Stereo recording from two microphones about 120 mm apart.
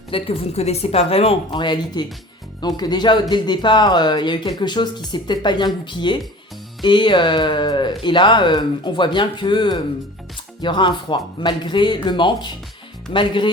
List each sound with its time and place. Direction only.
0.1 s speech: 55° left (ahead or behind)
1.5 s speech: 40° left (ahead or behind)